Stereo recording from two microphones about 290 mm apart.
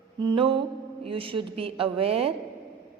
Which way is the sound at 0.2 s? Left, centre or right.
Centre.